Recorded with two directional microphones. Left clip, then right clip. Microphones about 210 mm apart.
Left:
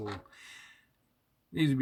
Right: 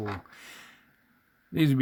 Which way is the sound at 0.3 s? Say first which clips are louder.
Right 4 dB; 50° right (ahead or behind).